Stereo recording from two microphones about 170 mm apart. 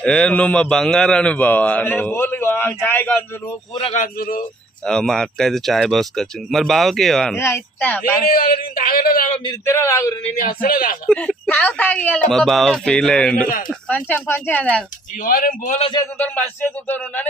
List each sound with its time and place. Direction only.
0.0 s a man's voice: 5° left (ahead or behind)
3.9 s a man's voice: 55° left (ahead or behind)
4.9 s speech: 5° left (ahead or behind)
7.3 s a man's voice: 15° left (ahead or behind)
8.2 s a man's voice: 60° left (ahead or behind)
9.3 s speech: 30° left (ahead or behind)
9.6 s a man's voice: 15° left (ahead or behind)
10.3 s a man's voice: 55° left (ahead or behind)
11.1 s a man's voice: 5° left (ahead or behind)
15.2 s a man's voice: 55° left (ahead or behind)
16.0 s a man's voice: 10° left (ahead or behind)